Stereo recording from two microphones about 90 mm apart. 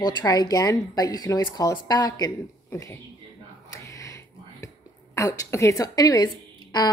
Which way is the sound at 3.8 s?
40° left (ahead or behind).